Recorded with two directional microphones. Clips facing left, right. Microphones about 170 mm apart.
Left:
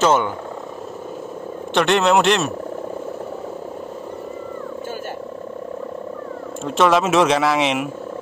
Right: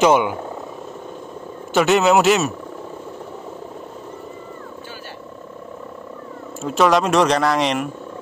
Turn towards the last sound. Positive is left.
turn(degrees=5)  # may be behind; listen again after turning